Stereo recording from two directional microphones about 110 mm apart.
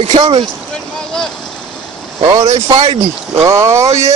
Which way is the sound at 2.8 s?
90° right.